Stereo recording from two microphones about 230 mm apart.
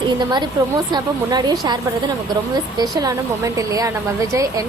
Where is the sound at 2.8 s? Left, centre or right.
Centre.